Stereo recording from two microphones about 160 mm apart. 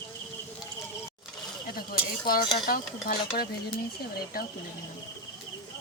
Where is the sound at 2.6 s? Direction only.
70° left (ahead or behind).